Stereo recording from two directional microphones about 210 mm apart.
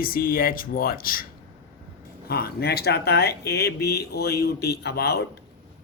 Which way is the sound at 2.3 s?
50° left (ahead or behind).